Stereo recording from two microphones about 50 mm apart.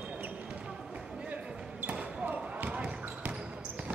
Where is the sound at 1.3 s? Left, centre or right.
Right.